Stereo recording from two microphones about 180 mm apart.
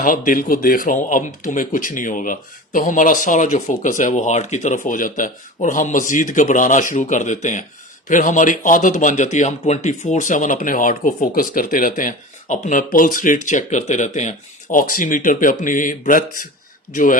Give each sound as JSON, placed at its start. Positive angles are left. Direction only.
{"t": 0.0, "sound": "speech", "side_deg": 50}